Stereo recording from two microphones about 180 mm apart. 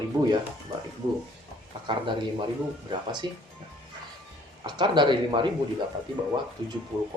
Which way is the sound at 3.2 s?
25° right (ahead or behind).